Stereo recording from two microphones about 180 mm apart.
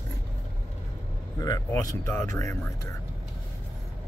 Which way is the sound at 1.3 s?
20° left (ahead or behind).